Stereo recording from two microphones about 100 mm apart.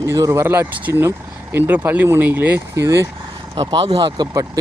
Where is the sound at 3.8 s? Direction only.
65° right (ahead or behind).